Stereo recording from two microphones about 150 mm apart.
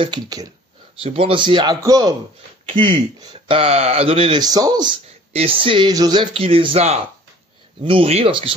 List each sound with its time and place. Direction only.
0.0 s a man's voice: 30° right (ahead or behind)
1.0 s speech: 40° right (ahead or behind); by 2.1 s 25° right (ahead or behind)
2.7 s speech: 35° right (ahead or behind)
4.4 s a man's voice: 25° right (ahead or behind)
5.3 s speech: 40° right (ahead or behind)
6.3 s speech: 40° right (ahead or behind)